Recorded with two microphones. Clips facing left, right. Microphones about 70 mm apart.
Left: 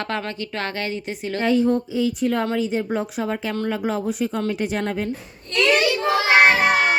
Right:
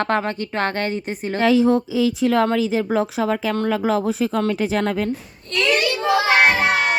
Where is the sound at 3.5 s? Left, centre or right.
Right.